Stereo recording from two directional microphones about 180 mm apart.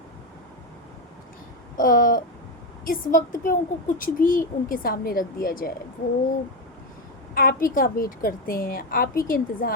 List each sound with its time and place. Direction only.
1.8 s speech: 50° left (ahead or behind)
7.3 s speech: 50° left (ahead or behind)